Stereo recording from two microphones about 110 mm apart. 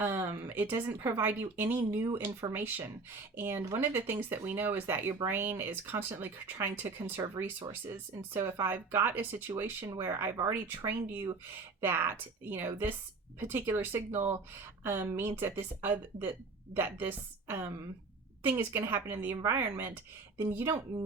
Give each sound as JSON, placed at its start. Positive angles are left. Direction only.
{"t": 0.0, "sound": "speech", "side_deg": -20}
{"t": 8.4, "sound": "speech", "side_deg": -20}